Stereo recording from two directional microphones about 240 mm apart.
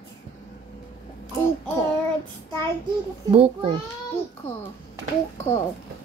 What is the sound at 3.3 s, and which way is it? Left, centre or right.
Speech, right.